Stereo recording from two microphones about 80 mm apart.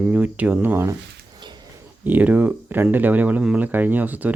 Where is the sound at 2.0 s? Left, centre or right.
Centre.